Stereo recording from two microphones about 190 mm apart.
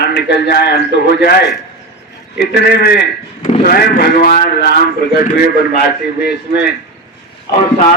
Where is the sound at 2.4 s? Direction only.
60° left (ahead or behind).